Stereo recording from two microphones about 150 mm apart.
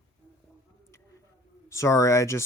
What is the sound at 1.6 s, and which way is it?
Speech, 20° left (ahead or behind).